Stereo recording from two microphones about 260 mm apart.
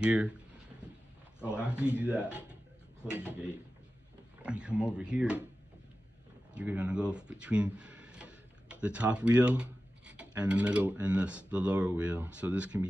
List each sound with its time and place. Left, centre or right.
0.0 s speech: centre
1.4 s speech: centre
6.5 s speech: centre